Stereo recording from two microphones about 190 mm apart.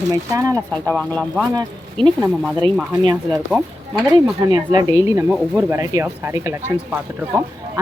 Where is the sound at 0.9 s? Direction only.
5° left (ahead or behind).